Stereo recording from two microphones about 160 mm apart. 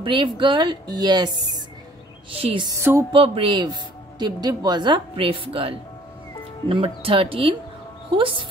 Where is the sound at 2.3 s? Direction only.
35° right (ahead or behind).